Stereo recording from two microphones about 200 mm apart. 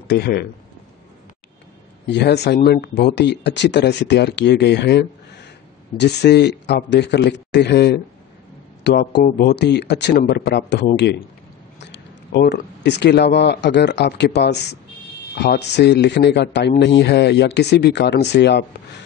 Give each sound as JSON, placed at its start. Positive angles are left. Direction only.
{"t": 0.1, "sound": "speech", "side_deg": 55}
{"t": 2.0, "sound": "speech", "side_deg": 55}